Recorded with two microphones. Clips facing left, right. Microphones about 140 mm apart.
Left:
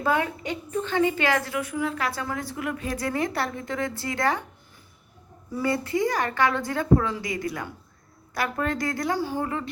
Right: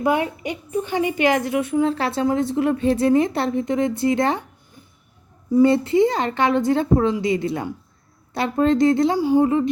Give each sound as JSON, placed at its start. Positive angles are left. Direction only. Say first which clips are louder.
{"t": 0.0, "sound": "a woman's voice", "louder": "right 4 dB", "side_deg": -20}
{"t": 5.5, "sound": "a woman's voice", "louder": "right 10 dB", "side_deg": -25}